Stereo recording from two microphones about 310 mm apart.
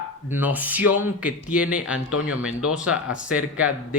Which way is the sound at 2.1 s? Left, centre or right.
Left.